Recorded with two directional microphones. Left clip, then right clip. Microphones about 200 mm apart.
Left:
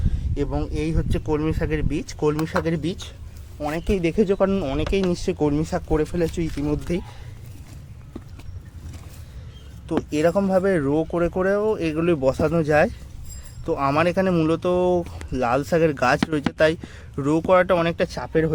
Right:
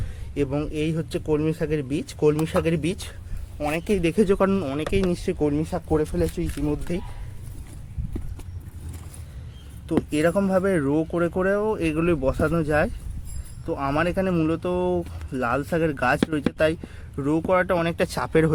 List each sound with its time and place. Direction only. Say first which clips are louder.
0.3 s speech: right 1 dB; 15° right (ahead or behind)
4.6 s speech: left 2 dB; 10° left (ahead or behind)
6.3 s speech: left 2 dB; 25° left (ahead or behind)
9.9 s speech: left 1 dB; centre (ahead or behind)
18.1 s speech: right 1 dB; 15° right (ahead or behind)